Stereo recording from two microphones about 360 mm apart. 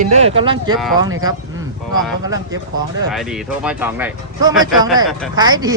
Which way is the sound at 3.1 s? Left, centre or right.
Centre.